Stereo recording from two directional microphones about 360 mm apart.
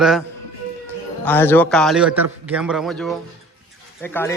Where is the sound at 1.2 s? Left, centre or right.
Centre.